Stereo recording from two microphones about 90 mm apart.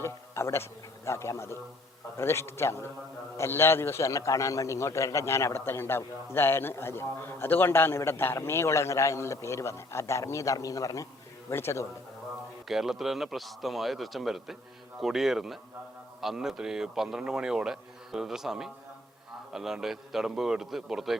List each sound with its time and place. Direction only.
0.0 s a man's voice: 30° left (ahead or behind)
12.6 s a man's voice: 5° right (ahead or behind)